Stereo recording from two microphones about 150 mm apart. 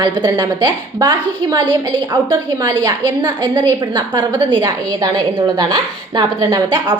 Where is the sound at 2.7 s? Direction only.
30° right (ahead or behind).